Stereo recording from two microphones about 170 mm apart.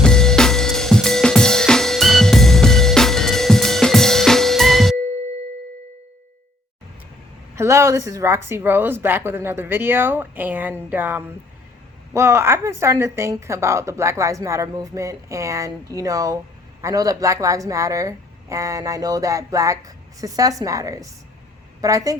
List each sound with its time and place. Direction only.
0.0 s drum kit: 5° left (ahead or behind)
7.5 s a woman's voice: 15° right (ahead or behind)